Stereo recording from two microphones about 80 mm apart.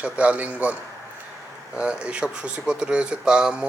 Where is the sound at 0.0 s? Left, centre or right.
Centre.